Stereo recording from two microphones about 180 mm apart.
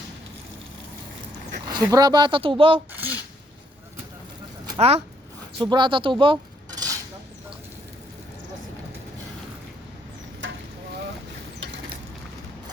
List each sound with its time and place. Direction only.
1.7 s speech: 20° right (ahead or behind)
2.9 s a sound: 10° right (ahead or behind)
4.8 s speech: 35° right (ahead or behind)
5.5 s cutlery: 25° right (ahead or behind)